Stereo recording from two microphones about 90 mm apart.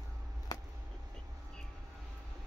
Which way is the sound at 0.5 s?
40° left (ahead or behind).